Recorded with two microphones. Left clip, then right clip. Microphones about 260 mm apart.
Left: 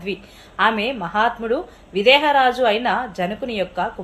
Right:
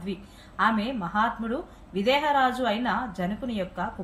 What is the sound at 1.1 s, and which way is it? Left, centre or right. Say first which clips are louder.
A woman's voice: left 7 dB; left.